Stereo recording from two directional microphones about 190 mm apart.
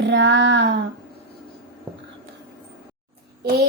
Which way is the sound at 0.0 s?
70° right (ahead or behind).